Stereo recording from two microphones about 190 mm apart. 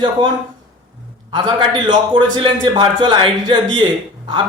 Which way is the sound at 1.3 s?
25° right (ahead or behind).